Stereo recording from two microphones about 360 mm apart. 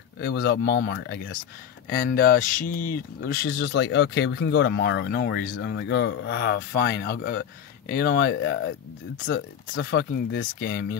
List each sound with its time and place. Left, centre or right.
0.2 s speech: left